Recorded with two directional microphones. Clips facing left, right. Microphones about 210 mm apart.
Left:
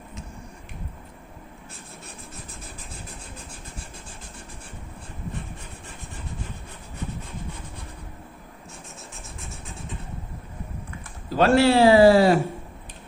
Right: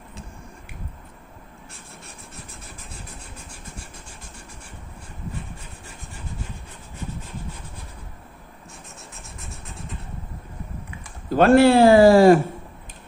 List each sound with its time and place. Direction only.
11.3 s a man's voice: 55° right (ahead or behind)